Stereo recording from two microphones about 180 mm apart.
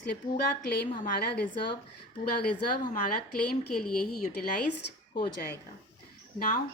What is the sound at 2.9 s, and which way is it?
Speech, 55° left (ahead or behind).